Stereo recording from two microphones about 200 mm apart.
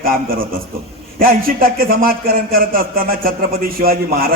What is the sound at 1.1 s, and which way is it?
A man's voice, 45° right (ahead or behind).